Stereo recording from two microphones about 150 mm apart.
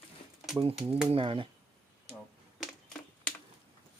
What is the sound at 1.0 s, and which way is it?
Speech, 35° right (ahead or behind).